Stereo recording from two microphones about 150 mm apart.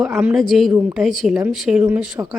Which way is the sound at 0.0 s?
5° right (ahead or behind).